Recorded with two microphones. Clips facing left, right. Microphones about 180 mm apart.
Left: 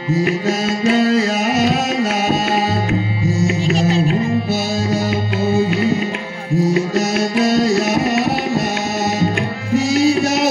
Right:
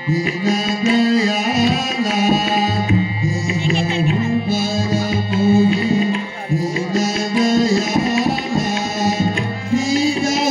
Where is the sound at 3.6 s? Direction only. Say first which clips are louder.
Even; 40° left (ahead or behind).